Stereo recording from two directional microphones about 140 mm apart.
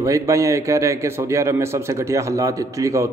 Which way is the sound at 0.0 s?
20° right (ahead or behind).